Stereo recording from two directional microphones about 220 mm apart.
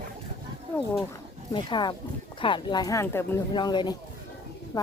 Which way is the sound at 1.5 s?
20° left (ahead or behind).